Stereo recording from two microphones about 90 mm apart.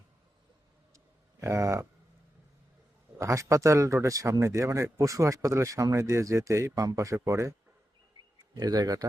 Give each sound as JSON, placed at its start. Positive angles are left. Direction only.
{"t": 0.9, "sound": "a sound", "side_deg": -30}
{"t": 3.2, "sound": "speech", "side_deg": -35}
{"t": 8.5, "sound": "speech", "side_deg": -45}